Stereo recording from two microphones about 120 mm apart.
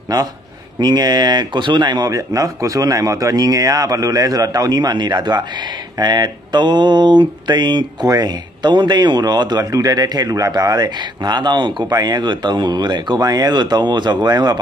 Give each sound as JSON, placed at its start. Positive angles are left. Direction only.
{"t": 0.7, "sound": "speech", "side_deg": -35}